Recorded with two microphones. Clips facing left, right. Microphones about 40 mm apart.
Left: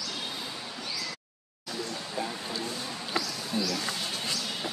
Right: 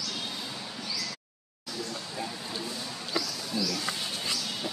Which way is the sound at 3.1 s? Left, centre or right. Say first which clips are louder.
Even; left.